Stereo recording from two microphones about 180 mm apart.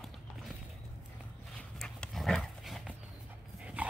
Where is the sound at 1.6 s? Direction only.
5° left (ahead or behind).